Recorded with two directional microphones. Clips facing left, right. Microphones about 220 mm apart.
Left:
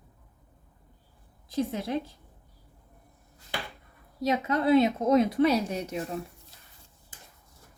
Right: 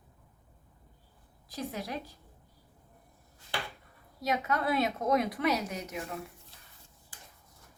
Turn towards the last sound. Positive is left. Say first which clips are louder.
# left 6 dB
turn(degrees=30)  # may be behind; listen again after turning